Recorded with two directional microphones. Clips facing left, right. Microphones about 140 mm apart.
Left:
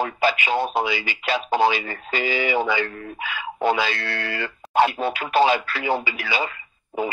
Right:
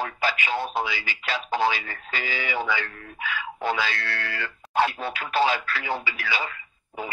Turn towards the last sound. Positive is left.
turn(degrees=20)  # may be behind; listen again after turning